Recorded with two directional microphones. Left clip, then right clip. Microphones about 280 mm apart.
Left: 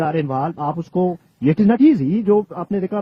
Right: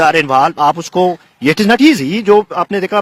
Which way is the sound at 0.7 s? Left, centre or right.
Right.